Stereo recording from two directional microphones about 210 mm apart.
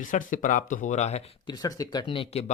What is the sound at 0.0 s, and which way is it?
Speech, 40° left (ahead or behind).